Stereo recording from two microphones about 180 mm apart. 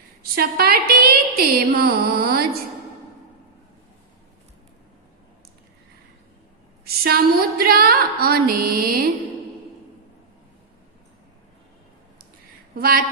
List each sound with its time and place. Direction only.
0.2 s a woman's voice: 60° right (ahead or behind)
6.8 s a sound: 60° right (ahead or behind)
12.7 s speech: 55° right (ahead or behind)